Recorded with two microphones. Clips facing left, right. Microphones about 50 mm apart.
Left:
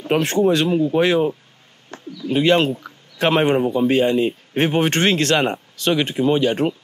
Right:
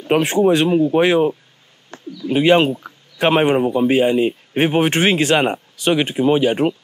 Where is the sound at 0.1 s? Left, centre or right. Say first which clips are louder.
Right 2 dB; centre.